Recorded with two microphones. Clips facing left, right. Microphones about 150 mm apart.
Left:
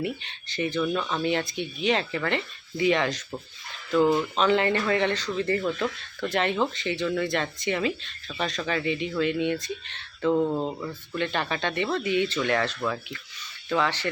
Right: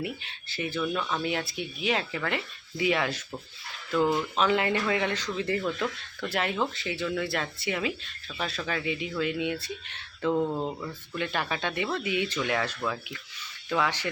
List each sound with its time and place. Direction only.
0.0 s speech: 5° right (ahead or behind)
3.9 s speech: 5° left (ahead or behind)
10.5 s speech: 15° left (ahead or behind)
11.1 s speech: 5° right (ahead or behind)